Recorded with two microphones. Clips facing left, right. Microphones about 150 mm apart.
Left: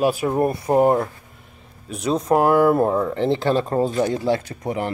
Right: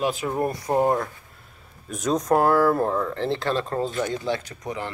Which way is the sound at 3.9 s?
35° left (ahead or behind).